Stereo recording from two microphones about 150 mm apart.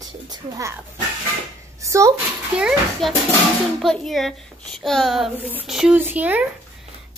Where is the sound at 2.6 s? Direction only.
5° right (ahead or behind).